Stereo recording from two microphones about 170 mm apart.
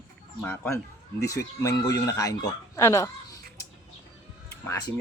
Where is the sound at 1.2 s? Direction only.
20° left (ahead or behind).